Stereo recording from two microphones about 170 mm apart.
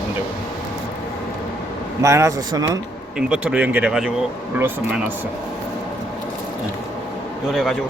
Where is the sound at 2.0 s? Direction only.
15° right (ahead or behind).